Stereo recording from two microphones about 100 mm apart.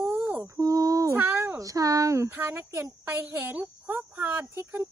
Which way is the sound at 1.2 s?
20° right (ahead or behind).